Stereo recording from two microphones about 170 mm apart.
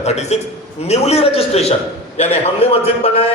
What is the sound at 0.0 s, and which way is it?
A man's voice, 40° left (ahead or behind).